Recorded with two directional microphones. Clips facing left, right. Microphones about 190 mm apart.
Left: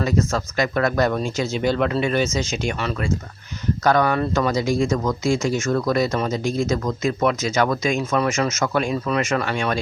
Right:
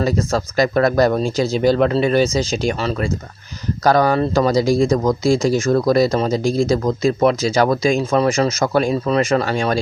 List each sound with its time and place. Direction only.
0.0 s speech: 35° right (ahead or behind)